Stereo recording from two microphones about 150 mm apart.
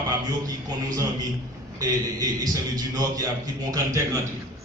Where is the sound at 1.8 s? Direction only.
25° right (ahead or behind).